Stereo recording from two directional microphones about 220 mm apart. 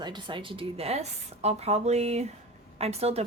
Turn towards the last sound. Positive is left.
turn(degrees=-30)  # may be behind; listen again after turning